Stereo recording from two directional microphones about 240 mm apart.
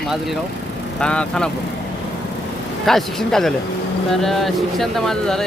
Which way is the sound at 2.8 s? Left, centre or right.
Centre.